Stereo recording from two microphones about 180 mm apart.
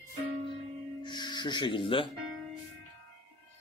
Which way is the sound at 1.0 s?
25° left (ahead or behind).